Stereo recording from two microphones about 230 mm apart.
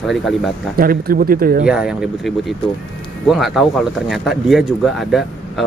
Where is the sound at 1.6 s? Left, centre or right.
Centre.